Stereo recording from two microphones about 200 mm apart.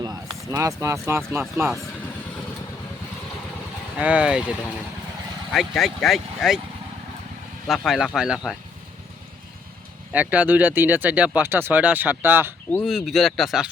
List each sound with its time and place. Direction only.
0.0 s speech: 15° right (ahead or behind)
3.9 s speech: 5° right (ahead or behind)
7.7 s speech: centre (ahead or behind)
10.1 s speech: 10° right (ahead or behind)
12.7 s speech: centre (ahead or behind)